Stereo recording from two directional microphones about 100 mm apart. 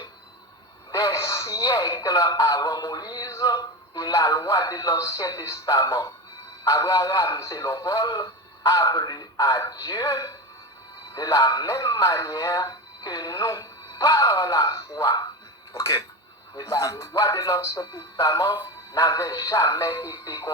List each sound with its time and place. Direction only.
0.9 s speech: 35° left (ahead or behind)